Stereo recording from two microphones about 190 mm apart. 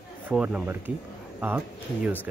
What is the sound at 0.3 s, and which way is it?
Speech, 5° right (ahead or behind).